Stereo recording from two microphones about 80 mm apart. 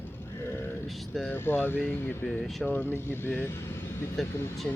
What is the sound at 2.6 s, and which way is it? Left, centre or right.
Speech, centre.